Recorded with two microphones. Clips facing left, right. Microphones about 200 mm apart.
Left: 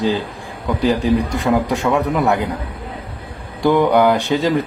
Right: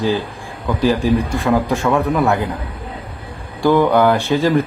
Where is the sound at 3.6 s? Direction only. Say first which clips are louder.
Even; 15° left (ahead or behind).